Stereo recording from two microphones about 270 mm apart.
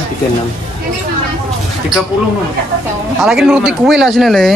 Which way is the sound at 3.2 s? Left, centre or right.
Centre.